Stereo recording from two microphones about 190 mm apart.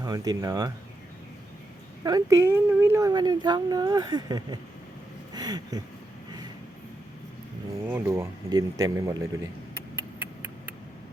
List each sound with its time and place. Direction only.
0.0 s speech: 20° right (ahead or behind)
2.0 s speech: 20° right (ahead or behind)
7.9 s speech: 10° right (ahead or behind)
9.9 s a sound: 10° right (ahead or behind)